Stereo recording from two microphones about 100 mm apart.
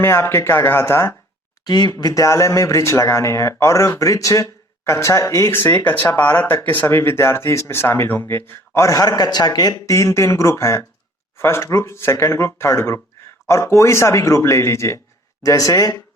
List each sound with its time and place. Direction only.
0.0 s speech: 25° left (ahead or behind)
1.6 s speech: 45° left (ahead or behind)